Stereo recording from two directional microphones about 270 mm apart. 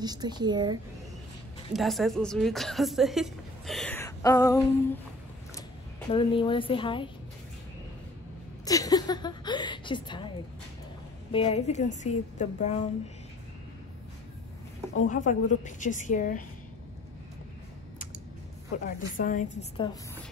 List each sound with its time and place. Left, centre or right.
0.0 s speech: centre
1.7 s a woman's voice: centre
6.1 s a woman's voice: centre
8.6 s a woman's voice: centre
11.3 s a woman's voice: left
15.0 s a woman's voice: left
18.9 s a woman's voice: left